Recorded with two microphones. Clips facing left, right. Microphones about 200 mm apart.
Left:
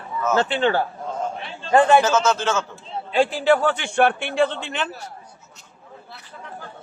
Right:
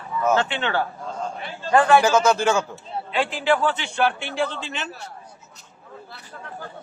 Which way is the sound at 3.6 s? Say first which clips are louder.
Left 3 dB; 50° left (ahead or behind).